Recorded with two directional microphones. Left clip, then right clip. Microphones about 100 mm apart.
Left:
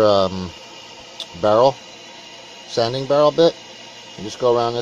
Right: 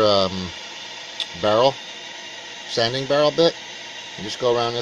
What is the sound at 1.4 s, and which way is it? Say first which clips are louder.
Speech: left 3 dB; 25° left (ahead or behind).